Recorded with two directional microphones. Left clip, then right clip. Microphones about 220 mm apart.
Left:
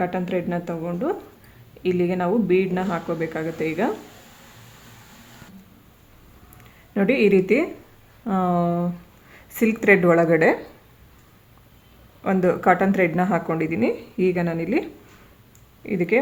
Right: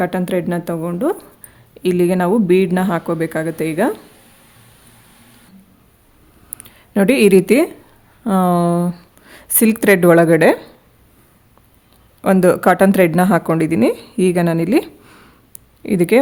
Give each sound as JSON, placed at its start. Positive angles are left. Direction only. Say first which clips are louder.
{"t": 0.0, "sound": "speech", "louder": "right 6 dB", "side_deg": -55}
{"t": 6.6, "sound": "speech", "louder": "right 7 dB", "side_deg": -55}
{"t": 12.2, "sound": "speech", "louder": "right 7 dB", "side_deg": -50}